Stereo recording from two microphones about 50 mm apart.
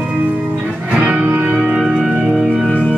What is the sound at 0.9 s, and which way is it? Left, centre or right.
Music, right.